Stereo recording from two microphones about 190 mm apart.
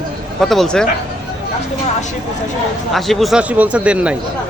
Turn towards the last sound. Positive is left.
turn(degrees=-5)  # may be behind; listen again after turning